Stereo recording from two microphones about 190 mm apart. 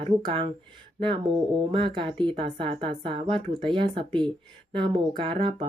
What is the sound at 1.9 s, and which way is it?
Speech, 25° right (ahead or behind).